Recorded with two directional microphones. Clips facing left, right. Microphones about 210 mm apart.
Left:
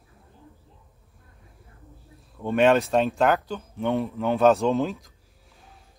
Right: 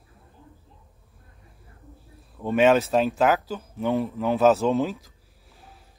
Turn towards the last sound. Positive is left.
turn(degrees=0)  # may be behind; listen again after turning